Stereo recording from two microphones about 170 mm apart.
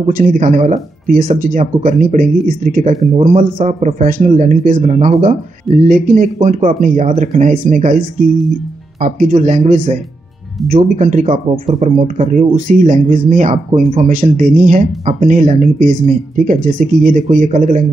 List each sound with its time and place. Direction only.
0.1 s speech: 50° right (ahead or behind)
2.9 s speech: 35° right (ahead or behind)
9.0 s speech: 50° right (ahead or behind)